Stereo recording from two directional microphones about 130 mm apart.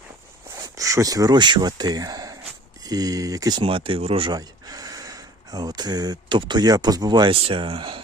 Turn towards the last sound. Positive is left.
turn(degrees=-40)  # may be behind; listen again after turning